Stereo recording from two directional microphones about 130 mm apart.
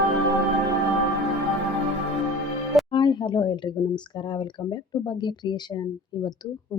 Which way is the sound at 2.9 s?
35° left (ahead or behind).